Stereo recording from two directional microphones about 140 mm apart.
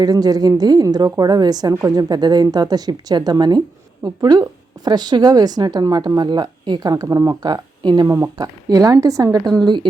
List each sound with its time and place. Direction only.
0.0 s speech: 30° right (ahead or behind)